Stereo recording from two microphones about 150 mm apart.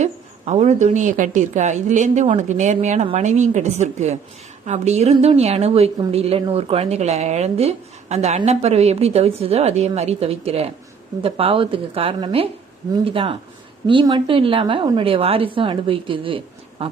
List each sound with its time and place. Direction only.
0.0 s a woman's voice: 50° right (ahead or behind)